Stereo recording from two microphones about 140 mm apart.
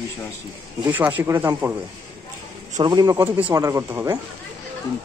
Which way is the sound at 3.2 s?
20° right (ahead or behind).